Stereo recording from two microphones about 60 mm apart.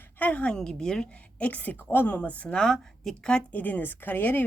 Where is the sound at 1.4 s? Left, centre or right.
Left; by 3.3 s centre.